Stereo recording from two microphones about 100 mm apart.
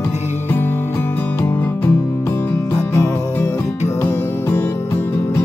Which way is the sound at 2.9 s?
30° left (ahead or behind).